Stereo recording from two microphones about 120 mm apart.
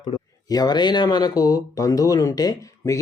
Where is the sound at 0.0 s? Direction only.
35° left (ahead or behind).